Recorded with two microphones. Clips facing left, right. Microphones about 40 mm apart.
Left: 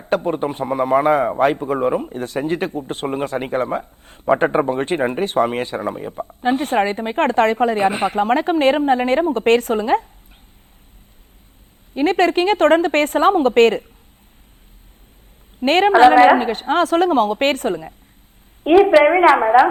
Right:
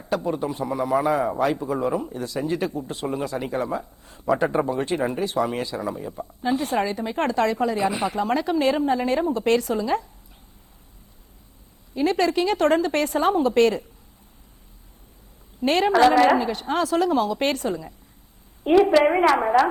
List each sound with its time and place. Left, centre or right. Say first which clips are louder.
0.1 s speech: left 5 dB; left
11.9 s speech: left 5 dB; left
15.6 s speech: left 6 dB; left
15.9 s a woman's voice: left 7 dB; left